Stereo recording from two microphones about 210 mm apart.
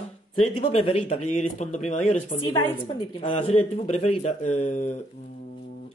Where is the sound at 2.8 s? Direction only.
25° left (ahead or behind).